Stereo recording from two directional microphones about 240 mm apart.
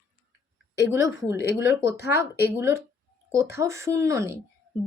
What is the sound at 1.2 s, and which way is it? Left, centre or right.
Speech, centre.